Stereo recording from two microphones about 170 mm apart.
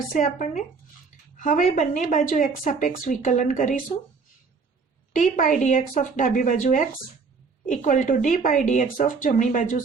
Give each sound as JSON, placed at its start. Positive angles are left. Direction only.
{"t": 0.1, "sound": "speech", "side_deg": 50}
{"t": 5.1, "sound": "speech", "side_deg": 50}